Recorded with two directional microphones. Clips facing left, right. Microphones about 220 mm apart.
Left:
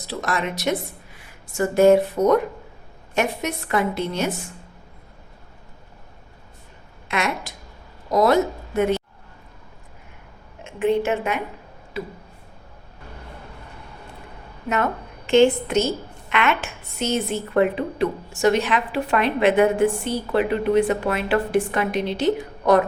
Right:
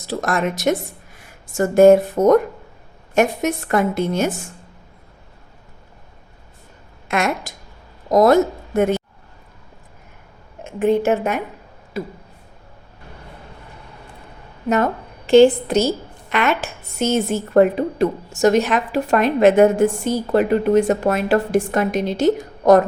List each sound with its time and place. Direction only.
0.1 s speech: 50° right (ahead or behind)
7.1 s a woman's voice: 45° right (ahead or behind)
10.6 s a woman's voice: 40° right (ahead or behind)
15.3 s a woman's voice: 35° right (ahead or behind)